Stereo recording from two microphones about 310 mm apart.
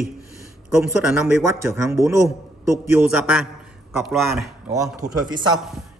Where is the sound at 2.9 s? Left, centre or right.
Centre.